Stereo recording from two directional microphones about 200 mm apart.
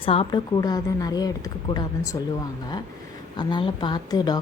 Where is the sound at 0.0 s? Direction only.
25° left (ahead or behind).